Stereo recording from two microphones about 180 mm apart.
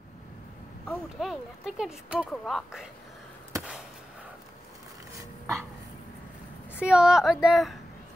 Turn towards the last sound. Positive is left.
turn(degrees=0)  # may be behind; listen again after turning